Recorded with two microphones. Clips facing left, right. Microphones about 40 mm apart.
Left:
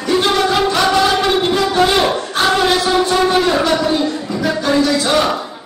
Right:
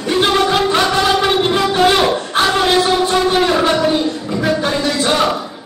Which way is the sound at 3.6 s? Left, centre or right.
Right.